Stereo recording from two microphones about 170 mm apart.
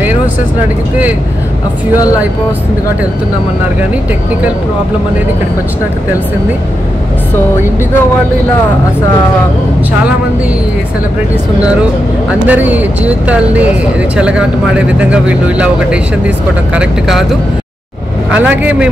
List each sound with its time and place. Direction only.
12.4 s speech: 10° right (ahead or behind)